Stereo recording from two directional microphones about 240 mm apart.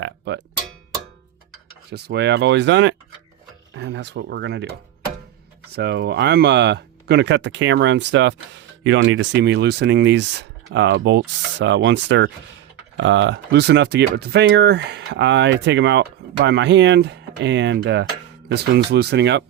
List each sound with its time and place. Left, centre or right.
0.0 s cowbell: right
1.9 s speech: right
5.7 s speech: right